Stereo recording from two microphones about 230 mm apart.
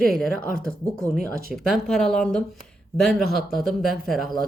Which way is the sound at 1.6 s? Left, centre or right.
Centre.